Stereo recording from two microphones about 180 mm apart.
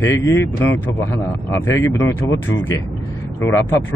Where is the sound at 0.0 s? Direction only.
15° left (ahead or behind).